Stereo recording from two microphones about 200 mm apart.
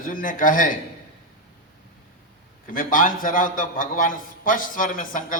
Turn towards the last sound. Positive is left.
turn(degrees=40)  # may be behind; listen again after turning